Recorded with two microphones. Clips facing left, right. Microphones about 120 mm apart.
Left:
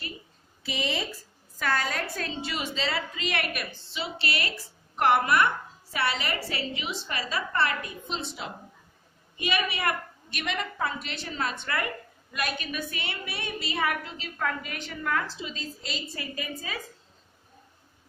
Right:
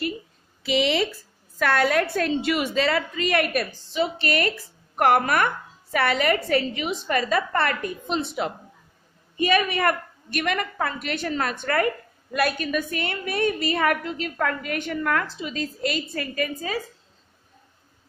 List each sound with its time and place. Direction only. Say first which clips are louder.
0.7 s speech: right 9 dB; 90° right
1.6 s a woman's voice: right 8 dB; 70° right (ahead or behind)